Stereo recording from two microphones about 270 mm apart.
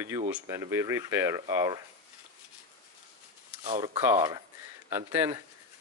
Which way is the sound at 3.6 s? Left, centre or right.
Right.